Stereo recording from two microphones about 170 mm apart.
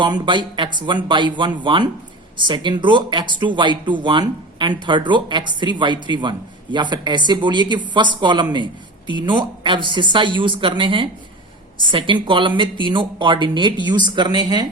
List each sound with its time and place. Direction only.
0.0 s speech: 25° right (ahead or behind)